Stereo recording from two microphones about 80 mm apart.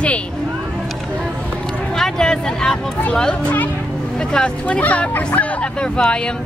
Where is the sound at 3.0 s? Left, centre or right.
Centre.